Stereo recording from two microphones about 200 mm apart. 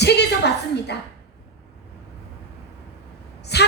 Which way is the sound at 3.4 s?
55° left (ahead or behind).